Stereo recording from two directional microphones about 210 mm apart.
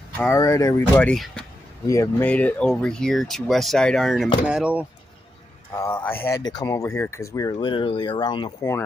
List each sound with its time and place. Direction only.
0.2 s speech: 15° left (ahead or behind); by 4.8 s 5° right (ahead or behind)
5.8 s speech: 10° left (ahead or behind)